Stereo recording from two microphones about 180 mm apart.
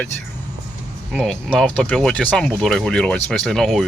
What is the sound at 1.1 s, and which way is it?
Speech, 5° left (ahead or behind).